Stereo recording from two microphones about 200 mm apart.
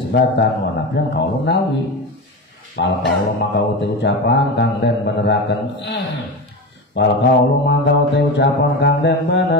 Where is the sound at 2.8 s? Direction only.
60° left (ahead or behind).